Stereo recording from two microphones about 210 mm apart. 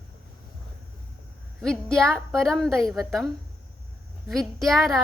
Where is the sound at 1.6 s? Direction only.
5° left (ahead or behind).